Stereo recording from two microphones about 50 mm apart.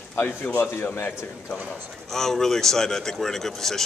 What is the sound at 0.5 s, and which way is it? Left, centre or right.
Speech, left.